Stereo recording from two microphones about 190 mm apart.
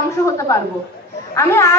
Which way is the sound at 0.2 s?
15° left (ahead or behind).